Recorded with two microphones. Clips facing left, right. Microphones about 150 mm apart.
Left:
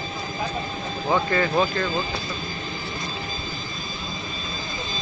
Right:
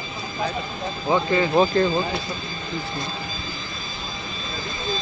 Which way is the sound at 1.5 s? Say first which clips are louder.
Right 5 dB; 30° right (ahead or behind).